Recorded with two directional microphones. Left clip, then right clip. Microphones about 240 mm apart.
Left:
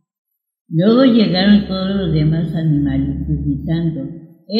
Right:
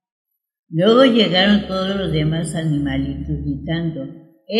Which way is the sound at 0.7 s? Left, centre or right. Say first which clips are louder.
Even; centre.